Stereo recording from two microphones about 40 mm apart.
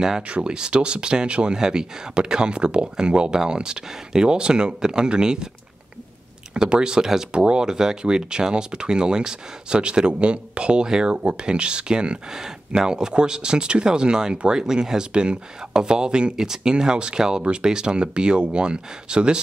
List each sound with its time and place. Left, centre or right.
0.3 s speech: right
6.5 s speech: right